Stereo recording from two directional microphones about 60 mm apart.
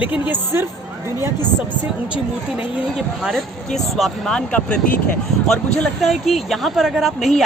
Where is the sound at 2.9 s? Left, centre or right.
Centre.